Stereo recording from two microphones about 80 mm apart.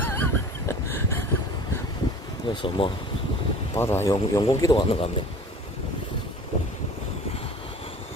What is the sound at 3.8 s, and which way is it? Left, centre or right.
Speech, left.